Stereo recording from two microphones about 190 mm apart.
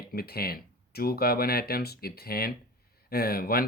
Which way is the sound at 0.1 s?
55° left (ahead or behind).